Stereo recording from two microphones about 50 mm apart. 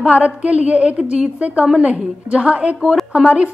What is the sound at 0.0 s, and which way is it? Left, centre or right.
A woman's voice, right.